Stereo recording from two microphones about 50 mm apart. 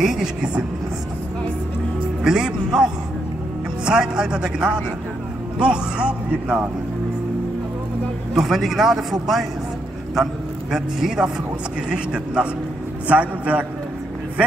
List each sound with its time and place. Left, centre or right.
0.0 s a man's voice: centre
2.2 s a man's voice: centre
8.4 s a man's voice: centre
10.7 s a man's voice: centre; by 13.7 s right